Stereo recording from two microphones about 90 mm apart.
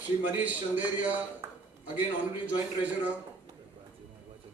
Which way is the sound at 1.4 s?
30° right (ahead or behind).